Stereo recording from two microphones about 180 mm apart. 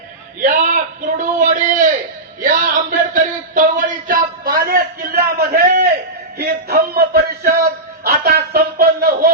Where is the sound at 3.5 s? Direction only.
50° right (ahead or behind).